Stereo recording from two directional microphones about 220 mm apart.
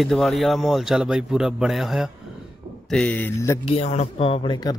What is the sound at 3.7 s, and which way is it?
Speech, 30° left (ahead or behind).